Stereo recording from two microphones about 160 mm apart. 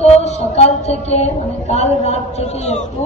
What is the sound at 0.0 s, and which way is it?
A woman's voice, 45° left (ahead or behind).